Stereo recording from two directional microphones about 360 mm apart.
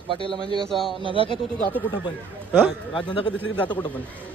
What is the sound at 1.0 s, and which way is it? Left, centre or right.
Speech, centre.